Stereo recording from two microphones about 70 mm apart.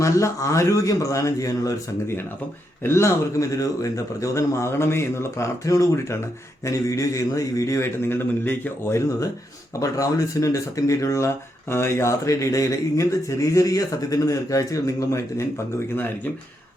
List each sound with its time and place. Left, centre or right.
0.0 s speech: left
8.9 s speech: left